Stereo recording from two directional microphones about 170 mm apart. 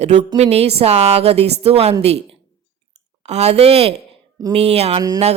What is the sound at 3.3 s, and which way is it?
Speech, 40° right (ahead or behind).